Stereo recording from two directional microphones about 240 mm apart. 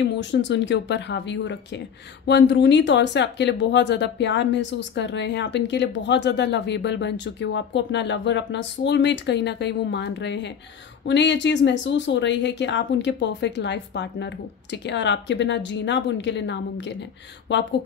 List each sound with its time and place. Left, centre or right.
0.0 s speech: left